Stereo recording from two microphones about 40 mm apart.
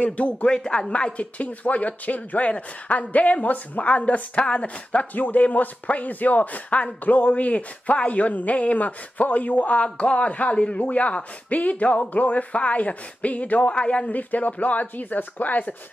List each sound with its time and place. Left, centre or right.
0.0 s speech: left
0.5 s speech: centre; by 3.9 s left
3.9 s a woman's voice: left
5.1 s speech: left
14.1 s speech: left